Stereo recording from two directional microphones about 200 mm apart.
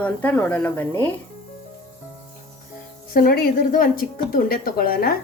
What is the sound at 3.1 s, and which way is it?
A woman's voice, 45° left (ahead or behind).